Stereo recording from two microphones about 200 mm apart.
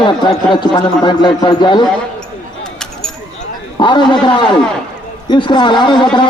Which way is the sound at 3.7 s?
20° left (ahead or behind).